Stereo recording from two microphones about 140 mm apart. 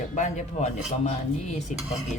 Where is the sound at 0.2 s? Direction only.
55° left (ahead or behind).